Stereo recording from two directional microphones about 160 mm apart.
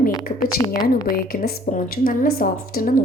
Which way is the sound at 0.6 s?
25° left (ahead or behind).